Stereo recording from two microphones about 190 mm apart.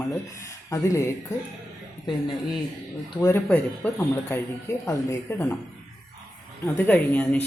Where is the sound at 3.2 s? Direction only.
10° left (ahead or behind).